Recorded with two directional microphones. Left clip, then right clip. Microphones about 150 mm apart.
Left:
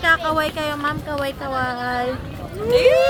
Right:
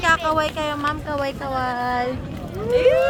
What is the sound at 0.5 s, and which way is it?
A woman's voice, centre (ahead or behind).